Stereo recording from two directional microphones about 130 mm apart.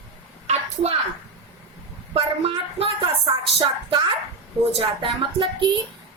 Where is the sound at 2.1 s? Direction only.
50° right (ahead or behind).